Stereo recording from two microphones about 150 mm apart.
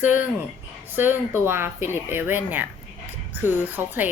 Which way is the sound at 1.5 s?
15° right (ahead or behind).